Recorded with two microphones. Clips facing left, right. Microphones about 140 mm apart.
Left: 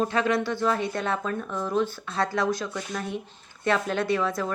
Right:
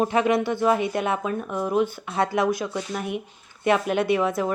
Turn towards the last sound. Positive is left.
turn(degrees=-20)  # may be behind; listen again after turning